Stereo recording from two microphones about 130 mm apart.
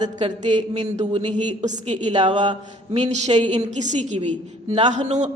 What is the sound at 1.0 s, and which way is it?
Speech, 45° right (ahead or behind).